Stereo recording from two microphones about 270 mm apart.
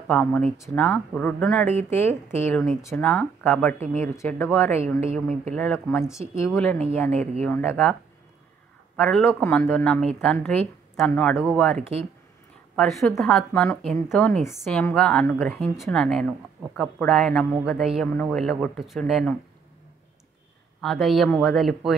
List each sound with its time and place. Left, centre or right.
0.1 s speech: centre
7.1 s speech: right
7.4 s speech: centre
8.9 s speech: centre
20.8 s speech: centre